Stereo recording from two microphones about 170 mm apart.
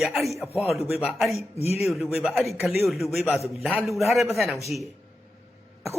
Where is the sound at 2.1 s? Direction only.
Centre (ahead or behind).